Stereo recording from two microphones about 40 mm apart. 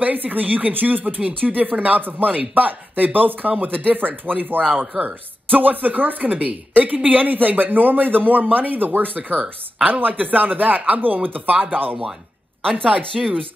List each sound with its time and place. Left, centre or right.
0.0 s a woman's voice: right